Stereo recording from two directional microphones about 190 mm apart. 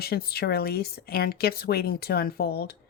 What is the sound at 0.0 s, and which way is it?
Speech, 55° left (ahead or behind).